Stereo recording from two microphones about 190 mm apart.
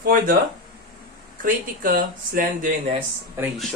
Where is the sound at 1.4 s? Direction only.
45° right (ahead or behind).